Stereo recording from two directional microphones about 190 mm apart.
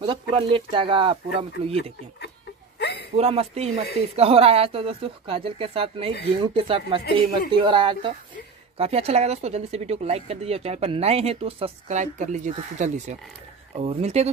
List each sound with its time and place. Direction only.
0.0 s speech: 25° right (ahead or behind)
2.8 s a sound: 60° left (ahead or behind)
3.2 s speech: 30° right (ahead or behind)